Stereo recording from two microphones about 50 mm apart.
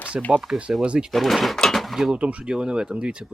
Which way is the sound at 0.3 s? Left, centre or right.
Centre.